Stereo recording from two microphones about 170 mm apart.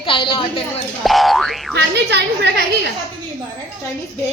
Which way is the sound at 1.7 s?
85° right.